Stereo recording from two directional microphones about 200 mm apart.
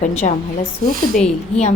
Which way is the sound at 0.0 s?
35° left (ahead or behind).